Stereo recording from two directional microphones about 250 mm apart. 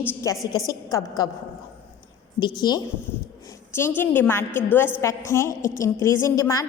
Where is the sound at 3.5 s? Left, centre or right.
Centre.